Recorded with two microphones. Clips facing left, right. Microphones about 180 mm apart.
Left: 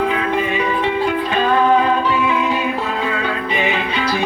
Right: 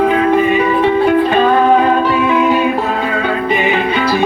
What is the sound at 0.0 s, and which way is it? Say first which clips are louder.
Music: right 7 dB; 50° right (ahead or behind).